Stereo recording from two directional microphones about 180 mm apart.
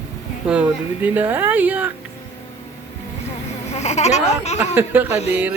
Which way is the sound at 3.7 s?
40° left (ahead or behind).